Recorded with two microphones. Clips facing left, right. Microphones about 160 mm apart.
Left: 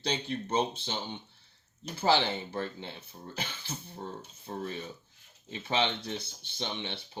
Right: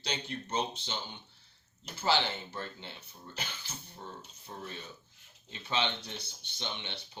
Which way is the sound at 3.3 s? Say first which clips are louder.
Left 4 dB; 30° left (ahead or behind).